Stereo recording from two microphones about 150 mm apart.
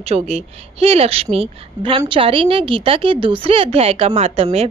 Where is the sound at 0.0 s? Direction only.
45° right (ahead or behind).